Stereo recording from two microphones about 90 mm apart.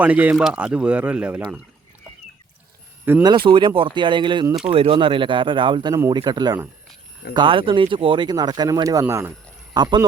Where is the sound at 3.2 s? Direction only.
65° right (ahead or behind).